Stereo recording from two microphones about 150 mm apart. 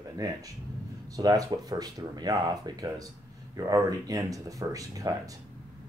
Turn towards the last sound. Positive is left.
turn(degrees=-25)  # may be behind; listen again after turning